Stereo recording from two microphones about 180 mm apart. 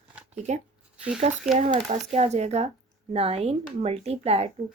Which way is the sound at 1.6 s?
40° right (ahead or behind).